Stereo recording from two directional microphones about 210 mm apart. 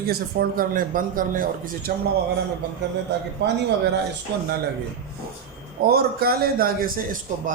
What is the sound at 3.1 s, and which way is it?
Speech, 55° right (ahead or behind).